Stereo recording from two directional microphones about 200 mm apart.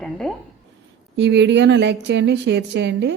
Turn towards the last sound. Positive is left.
turn(degrees=-60)  # may be behind; listen again after turning